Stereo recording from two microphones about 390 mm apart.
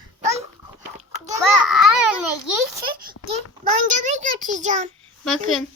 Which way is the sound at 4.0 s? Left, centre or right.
Centre.